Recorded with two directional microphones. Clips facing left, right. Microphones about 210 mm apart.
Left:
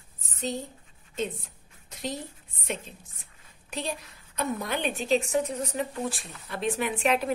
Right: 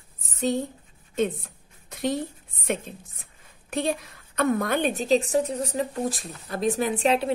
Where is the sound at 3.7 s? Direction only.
55° right (ahead or behind); by 7.3 s 30° right (ahead or behind).